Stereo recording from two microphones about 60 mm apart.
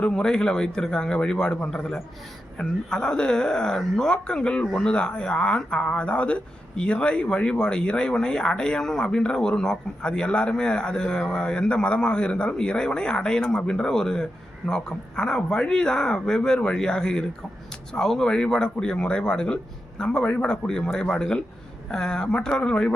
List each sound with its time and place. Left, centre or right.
0.0 s speech: centre